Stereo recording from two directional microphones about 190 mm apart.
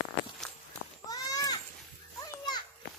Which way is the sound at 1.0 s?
20° left (ahead or behind).